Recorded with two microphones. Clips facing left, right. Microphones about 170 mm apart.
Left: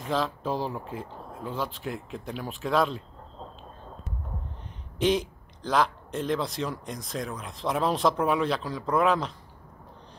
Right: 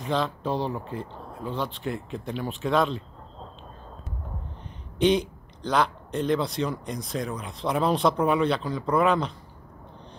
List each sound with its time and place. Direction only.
0.0 s a man's voice: centre (ahead or behind)
4.9 s a man's voice: centre (ahead or behind)